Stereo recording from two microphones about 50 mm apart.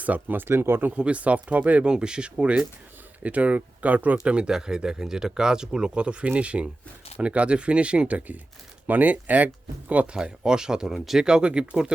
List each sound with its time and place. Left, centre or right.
0.0 s speech: right
0.4 s speech: right
0.9 s speech: right
1.9 s speech: centre
4.2 s speech: centre
10.2 s speech: centre